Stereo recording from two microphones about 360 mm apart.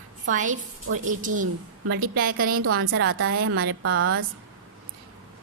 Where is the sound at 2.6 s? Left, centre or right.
Right.